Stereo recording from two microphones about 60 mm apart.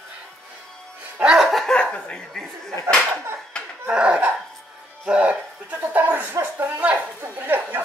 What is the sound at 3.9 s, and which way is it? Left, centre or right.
Laughter, centre.